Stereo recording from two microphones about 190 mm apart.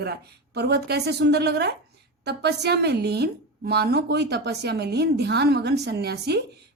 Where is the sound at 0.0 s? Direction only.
60° right (ahead or behind).